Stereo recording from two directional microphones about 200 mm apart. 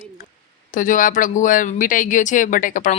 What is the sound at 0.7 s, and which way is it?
Speech, 40° left (ahead or behind).